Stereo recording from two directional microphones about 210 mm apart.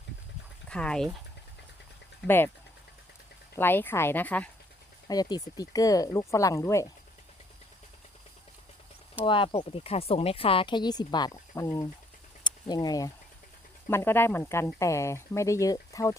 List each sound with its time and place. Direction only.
0.7 s speech: 5° left (ahead or behind)
2.2 s speech: 10° left (ahead or behind)
3.5 s speech: 10° left (ahead or behind)
5.0 s speech: 20° left (ahead or behind)
9.2 s speech: 25° left (ahead or behind)
12.4 s a sound: 20° left (ahead or behind)
13.8 s speech: 10° left (ahead or behind)